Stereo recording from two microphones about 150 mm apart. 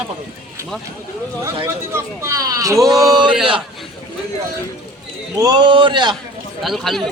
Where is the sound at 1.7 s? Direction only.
20° right (ahead or behind).